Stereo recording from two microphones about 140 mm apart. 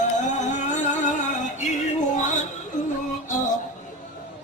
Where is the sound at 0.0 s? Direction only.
60° left (ahead or behind).